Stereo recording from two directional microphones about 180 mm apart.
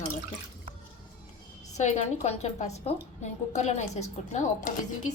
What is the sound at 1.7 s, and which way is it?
A woman's voice, 40° left (ahead or behind).